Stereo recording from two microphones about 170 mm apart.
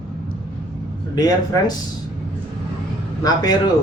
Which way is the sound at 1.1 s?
25° left (ahead or behind).